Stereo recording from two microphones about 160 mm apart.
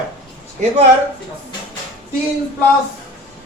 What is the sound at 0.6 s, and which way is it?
Speech, 50° right (ahead or behind).